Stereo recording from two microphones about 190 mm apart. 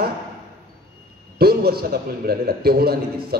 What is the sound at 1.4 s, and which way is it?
A man's voice, 55° right (ahead or behind).